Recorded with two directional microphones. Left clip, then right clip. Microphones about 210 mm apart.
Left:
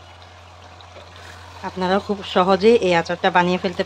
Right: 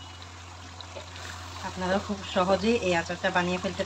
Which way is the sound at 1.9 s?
55° left (ahead or behind).